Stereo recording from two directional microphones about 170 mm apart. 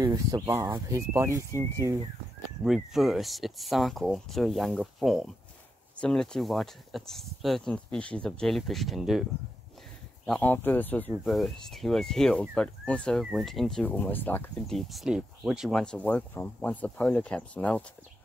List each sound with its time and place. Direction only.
0.0 s speech: 20° right (ahead or behind)
2.6 s speech: centre (ahead or behind)
10.2 s speech: 5° left (ahead or behind)